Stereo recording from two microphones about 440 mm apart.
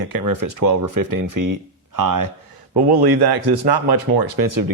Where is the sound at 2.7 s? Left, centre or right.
Right.